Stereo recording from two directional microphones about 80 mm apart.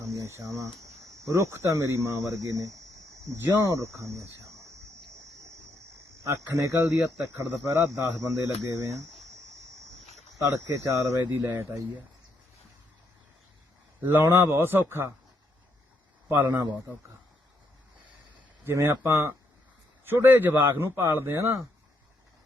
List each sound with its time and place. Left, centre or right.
0.0 s speech: right
4.4 s a sound: right
6.2 s speech: right
11.2 s a man's voice: right
14.0 s speech: right
16.3 s a man's voice: right
18.6 s speech: right
20.1 s a man's voice: right